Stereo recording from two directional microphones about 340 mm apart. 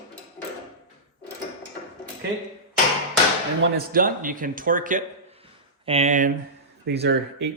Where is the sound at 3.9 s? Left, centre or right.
Right.